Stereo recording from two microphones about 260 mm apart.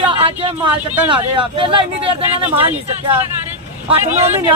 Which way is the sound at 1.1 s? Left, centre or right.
Centre.